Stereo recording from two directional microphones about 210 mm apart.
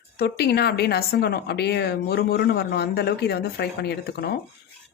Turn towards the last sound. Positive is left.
turn(degrees=50)  # may be behind; listen again after turning